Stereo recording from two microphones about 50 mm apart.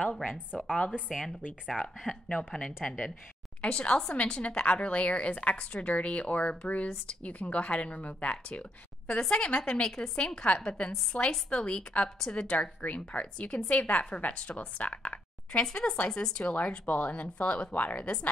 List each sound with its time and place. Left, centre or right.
0.0 s a woman's voice: left
1.0 s a woman's voice: centre; by 15.6 s left
15.6 s a woman's voice: centre
16.5 s a woman's voice: left